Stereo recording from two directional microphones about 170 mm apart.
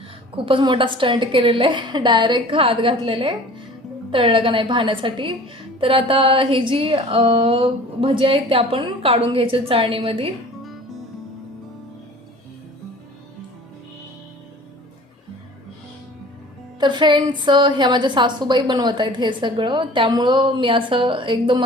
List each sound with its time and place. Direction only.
0.3 s a woman's voice: 30° right (ahead or behind)
16.8 s a woman's voice: 25° right (ahead or behind)